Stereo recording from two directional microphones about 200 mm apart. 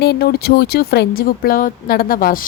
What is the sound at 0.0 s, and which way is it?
A woman's voice, 55° left (ahead or behind).